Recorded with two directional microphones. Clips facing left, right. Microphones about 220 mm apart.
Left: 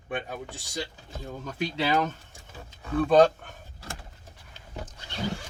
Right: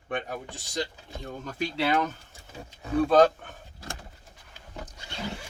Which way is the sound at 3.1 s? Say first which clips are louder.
Left 2 dB; centre (ahead or behind).